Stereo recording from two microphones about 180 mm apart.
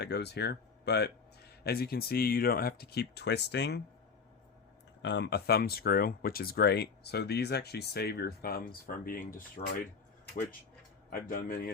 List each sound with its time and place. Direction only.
0.0 s speech: 65° left (ahead or behind)
5.0 s speech: 70° left (ahead or behind); by 9.3 s 50° left (ahead or behind)
9.6 s speech: 35° left (ahead or behind)
11.1 s speech: 55° left (ahead or behind)